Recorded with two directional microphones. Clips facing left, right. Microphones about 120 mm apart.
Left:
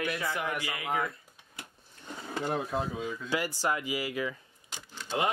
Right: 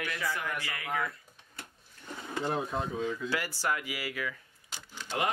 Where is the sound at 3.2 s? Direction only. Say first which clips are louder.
Left 2 dB; 15° left (ahead or behind).